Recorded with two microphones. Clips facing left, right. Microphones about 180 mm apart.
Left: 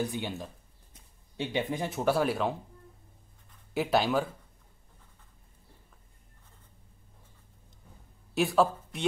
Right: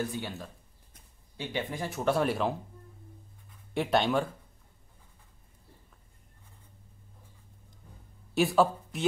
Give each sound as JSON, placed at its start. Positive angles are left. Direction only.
{"t": 0.0, "sound": "speech", "side_deg": 15}
{"t": 2.0, "sound": "speech", "side_deg": 0}
{"t": 3.7, "sound": "speech", "side_deg": 0}
{"t": 8.4, "sound": "speech", "side_deg": 0}